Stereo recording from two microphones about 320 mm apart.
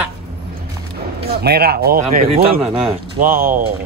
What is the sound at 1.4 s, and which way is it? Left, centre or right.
Speech, right.